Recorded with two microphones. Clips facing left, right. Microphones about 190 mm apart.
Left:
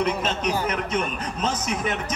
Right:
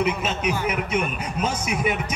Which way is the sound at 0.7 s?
10° right (ahead or behind).